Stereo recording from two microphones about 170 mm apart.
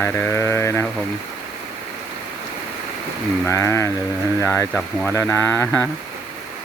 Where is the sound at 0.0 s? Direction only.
15° left (ahead or behind).